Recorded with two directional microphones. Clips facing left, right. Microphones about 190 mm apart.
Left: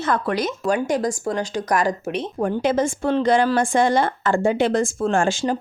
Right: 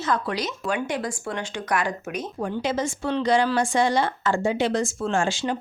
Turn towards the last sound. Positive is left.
turn(degrees=45)  # may be behind; listen again after turning